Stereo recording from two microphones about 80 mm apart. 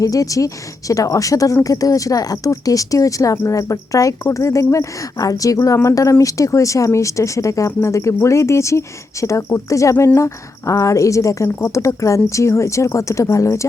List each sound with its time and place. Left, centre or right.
0.0 s a woman's voice: left